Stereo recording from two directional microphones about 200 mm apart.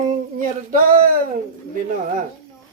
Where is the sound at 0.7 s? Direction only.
45° right (ahead or behind).